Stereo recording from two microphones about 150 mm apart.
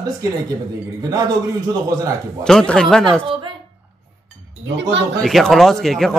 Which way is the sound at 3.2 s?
35° right (ahead or behind).